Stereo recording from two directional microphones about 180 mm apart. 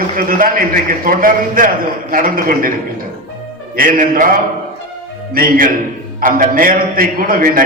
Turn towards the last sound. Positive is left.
turn(degrees=-50)  # may be behind; listen again after turning